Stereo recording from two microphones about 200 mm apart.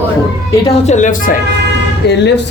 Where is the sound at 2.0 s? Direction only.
60° left (ahead or behind).